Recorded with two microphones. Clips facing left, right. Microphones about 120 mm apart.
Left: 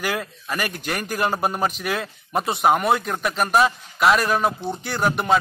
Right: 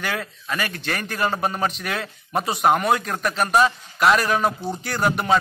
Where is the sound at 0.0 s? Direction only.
5° left (ahead or behind).